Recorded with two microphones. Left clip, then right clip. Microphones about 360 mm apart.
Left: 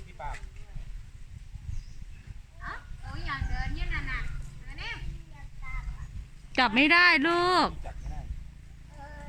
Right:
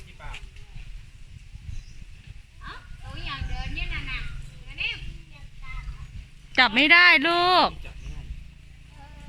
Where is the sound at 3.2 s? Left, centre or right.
Centre.